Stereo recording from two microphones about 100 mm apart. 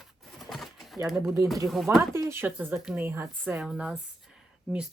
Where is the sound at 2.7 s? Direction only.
5° right (ahead or behind).